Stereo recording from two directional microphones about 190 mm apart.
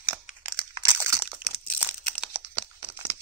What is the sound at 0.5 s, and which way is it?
Crunch, 15° right (ahead or behind).